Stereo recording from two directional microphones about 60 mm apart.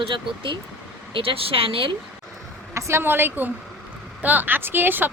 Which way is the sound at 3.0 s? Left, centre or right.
Right.